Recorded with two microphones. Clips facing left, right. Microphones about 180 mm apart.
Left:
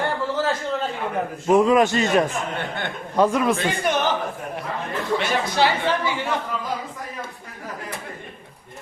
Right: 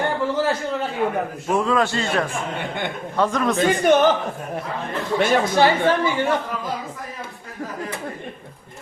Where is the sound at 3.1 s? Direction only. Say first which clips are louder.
Left 2 dB; 10° left (ahead or behind).